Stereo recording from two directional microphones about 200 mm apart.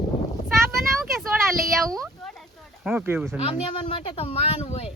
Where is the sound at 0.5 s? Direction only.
Centre (ahead or behind).